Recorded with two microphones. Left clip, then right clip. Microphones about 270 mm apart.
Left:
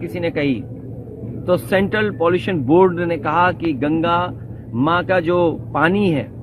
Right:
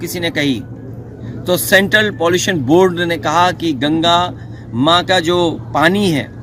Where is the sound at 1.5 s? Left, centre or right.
Right.